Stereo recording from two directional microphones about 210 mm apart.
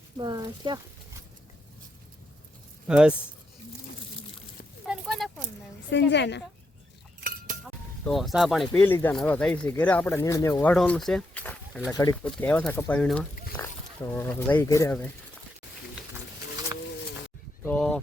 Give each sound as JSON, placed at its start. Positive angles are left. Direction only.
{"t": 0.2, "sound": "speech", "side_deg": -20}
{"t": 2.8, "sound": "speech", "side_deg": -5}
{"t": 4.9, "sound": "a sound", "side_deg": 0}
{"t": 5.9, "sound": "a woman's voice", "side_deg": 55}
{"t": 7.2, "sound": "chink", "side_deg": -40}
{"t": 8.0, "sound": "speech", "side_deg": 0}
{"t": 17.6, "sound": "a sound", "side_deg": 5}